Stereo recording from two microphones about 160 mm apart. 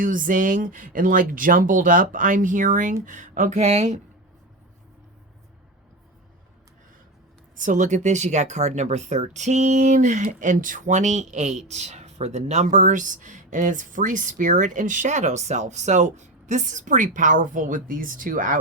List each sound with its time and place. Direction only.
0.0 s speech: 55° right (ahead or behind)
7.5 s speech: 55° right (ahead or behind)